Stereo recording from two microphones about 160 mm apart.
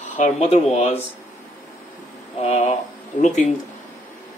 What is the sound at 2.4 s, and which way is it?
Speech, 45° left (ahead or behind).